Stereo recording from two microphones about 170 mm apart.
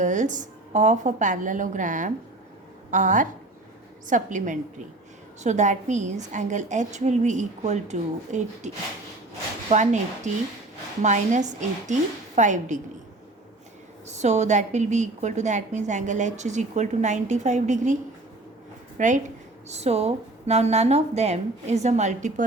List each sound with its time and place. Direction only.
0.0 s a woman's voice: 45° right (ahead or behind)
14.1 s a woman's voice: 40° right (ahead or behind)
18.9 s a woman's voice: 50° right (ahead or behind)